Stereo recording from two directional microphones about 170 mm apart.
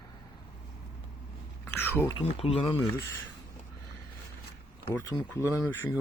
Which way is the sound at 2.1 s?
35° left (ahead or behind).